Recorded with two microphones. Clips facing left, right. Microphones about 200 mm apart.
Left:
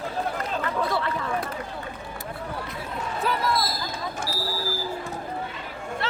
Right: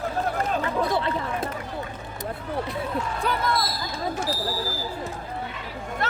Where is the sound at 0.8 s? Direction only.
20° right (ahead or behind).